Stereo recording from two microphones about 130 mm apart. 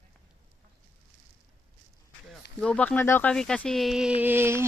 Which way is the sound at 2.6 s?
10° left (ahead or behind).